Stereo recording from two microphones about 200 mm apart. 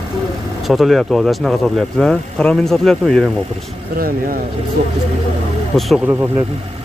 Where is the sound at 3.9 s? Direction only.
45° right (ahead or behind).